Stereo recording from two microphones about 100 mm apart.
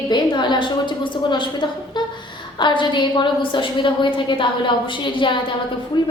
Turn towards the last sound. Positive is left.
turn(degrees=45)  # may be behind; listen again after turning